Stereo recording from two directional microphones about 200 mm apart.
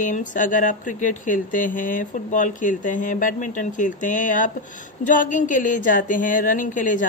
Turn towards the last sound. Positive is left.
turn(degrees=40)  # may be behind; listen again after turning